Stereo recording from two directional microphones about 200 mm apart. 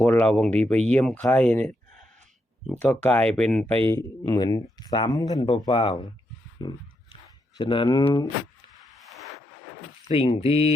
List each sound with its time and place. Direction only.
0.0 s speech: 10° left (ahead or behind); by 6.1 s 25° left (ahead or behind)
6.6 s dog: 20° left (ahead or behind)
7.6 s speech: 25° left (ahead or behind)
10.1 s speech: 30° left (ahead or behind)